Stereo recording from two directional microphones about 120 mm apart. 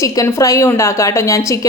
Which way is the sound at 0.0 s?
25° left (ahead or behind).